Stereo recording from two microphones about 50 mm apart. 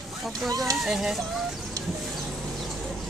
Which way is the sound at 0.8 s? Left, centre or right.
Centre.